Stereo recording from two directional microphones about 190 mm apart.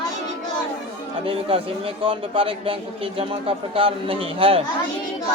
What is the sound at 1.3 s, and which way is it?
A man's voice, 30° right (ahead or behind).